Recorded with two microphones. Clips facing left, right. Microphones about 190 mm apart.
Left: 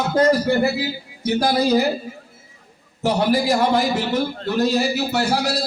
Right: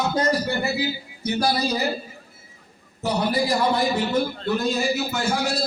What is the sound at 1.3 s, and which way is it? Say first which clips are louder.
Speech: left 6 dB; 55° left (ahead or behind).